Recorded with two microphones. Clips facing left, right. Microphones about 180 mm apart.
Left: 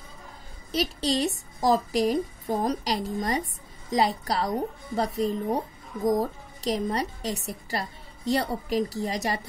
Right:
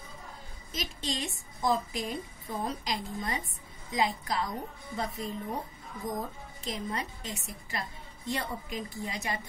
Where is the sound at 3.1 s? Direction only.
40° left (ahead or behind).